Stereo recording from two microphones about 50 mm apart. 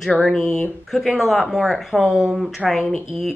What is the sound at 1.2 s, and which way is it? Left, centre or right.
Speech, centre.